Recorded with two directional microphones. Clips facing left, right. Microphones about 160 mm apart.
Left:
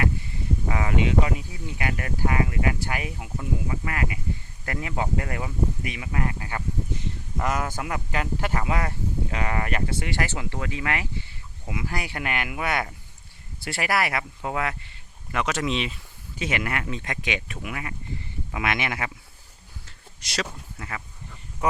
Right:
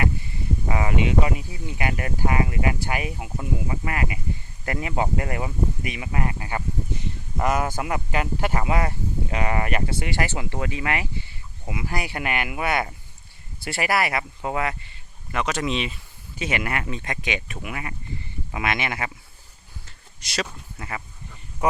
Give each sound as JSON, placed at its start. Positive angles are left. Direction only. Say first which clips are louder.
{"t": 0.7, "sound": "speech", "louder": "right 1 dB", "side_deg": -10}
{"t": 20.2, "sound": "speech", "louder": "right 1 dB", "side_deg": -5}